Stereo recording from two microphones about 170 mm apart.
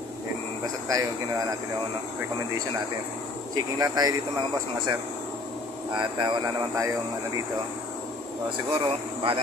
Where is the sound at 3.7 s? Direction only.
25° right (ahead or behind).